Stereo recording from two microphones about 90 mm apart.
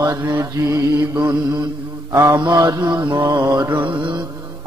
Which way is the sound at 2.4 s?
50° right (ahead or behind).